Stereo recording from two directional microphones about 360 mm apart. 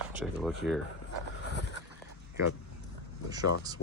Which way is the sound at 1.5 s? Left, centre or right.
Right.